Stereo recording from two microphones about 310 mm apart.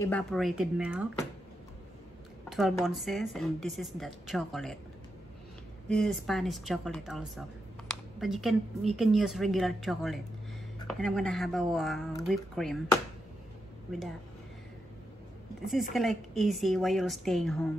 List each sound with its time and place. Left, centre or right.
0.0 s speech: centre
2.5 s speech: centre
5.9 s speech: centre
15.6 s speech: centre